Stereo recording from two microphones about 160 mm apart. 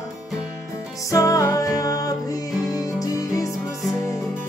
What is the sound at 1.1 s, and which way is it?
Music, 20° left (ahead or behind).